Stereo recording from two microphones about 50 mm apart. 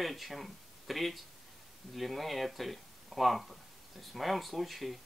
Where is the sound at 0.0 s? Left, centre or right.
Centre.